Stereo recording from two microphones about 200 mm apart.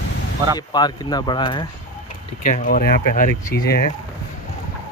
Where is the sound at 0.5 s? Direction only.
20° left (ahead or behind).